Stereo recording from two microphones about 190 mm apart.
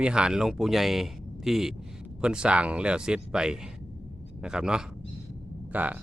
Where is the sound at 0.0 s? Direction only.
5° right (ahead or behind).